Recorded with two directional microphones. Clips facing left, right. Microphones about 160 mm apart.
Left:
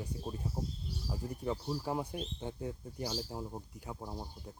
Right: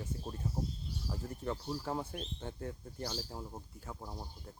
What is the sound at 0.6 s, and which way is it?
Speech, 5° left (ahead or behind).